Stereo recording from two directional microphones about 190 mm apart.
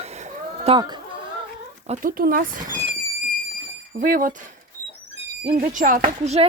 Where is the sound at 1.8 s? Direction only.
40° right (ahead or behind).